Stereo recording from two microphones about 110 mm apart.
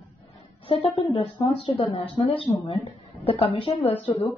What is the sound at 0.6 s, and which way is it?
Speech, 55° left (ahead or behind).